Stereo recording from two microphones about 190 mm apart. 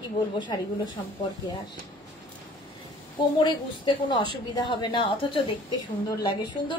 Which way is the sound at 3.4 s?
25° left (ahead or behind).